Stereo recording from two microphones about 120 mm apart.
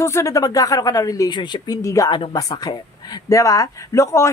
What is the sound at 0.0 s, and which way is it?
Speech, 25° left (ahead or behind).